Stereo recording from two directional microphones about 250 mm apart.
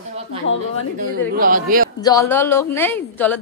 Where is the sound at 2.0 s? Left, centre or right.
Centre.